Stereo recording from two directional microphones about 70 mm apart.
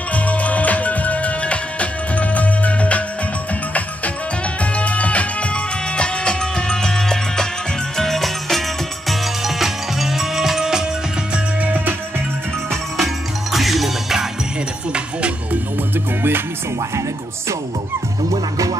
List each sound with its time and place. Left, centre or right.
0.1 s music: left
4.7 s music: centre
11.6 s music: right
12.9 s music: centre
16.2 s music: right
18.3 s music: right